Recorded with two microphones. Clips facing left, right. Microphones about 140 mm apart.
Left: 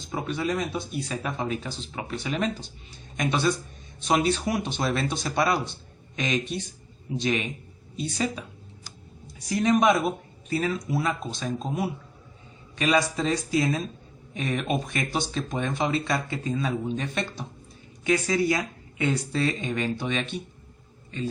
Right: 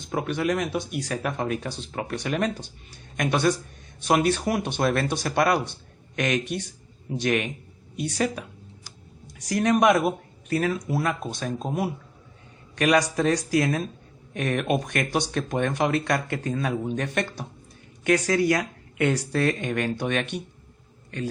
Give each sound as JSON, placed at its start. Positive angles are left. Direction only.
{"t": 0.0, "sound": "speech", "side_deg": -60}
{"t": 9.5, "sound": "a man's voice", "side_deg": -60}